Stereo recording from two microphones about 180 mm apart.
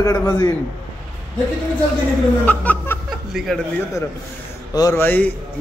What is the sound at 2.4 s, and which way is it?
A man's voice, 10° left (ahead or behind).